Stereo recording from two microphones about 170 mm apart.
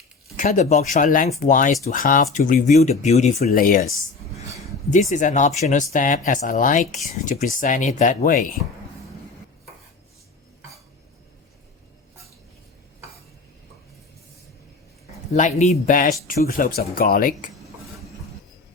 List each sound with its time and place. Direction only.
0.3 s speech: 45° left (ahead or behind)
3.5 s speech: 55° left (ahead or behind)
4.9 s speech: 45° left (ahead or behind)
15.1 s speech: 45° left (ahead or behind)